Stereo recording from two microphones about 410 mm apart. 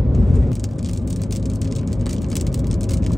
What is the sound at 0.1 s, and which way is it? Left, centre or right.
Vehicle, centre.